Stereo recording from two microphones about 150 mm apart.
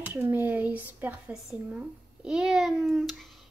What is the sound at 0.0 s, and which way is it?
Speech, 15° right (ahead or behind).